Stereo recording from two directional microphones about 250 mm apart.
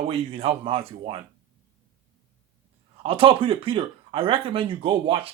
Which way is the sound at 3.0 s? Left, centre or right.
Right.